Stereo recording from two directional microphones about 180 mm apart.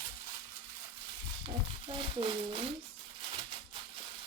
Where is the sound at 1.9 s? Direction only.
30° right (ahead or behind).